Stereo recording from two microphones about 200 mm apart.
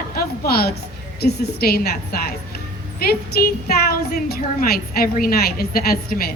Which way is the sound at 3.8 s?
50° left (ahead or behind).